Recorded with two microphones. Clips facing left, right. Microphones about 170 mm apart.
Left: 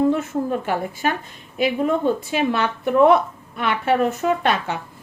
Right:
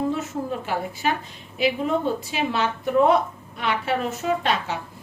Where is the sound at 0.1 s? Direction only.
55° left (ahead or behind).